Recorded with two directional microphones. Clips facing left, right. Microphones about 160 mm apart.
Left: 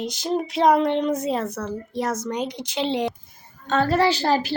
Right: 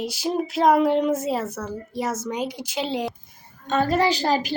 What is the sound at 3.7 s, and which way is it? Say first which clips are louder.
Speech: left 1 dB; 15° right (ahead or behind).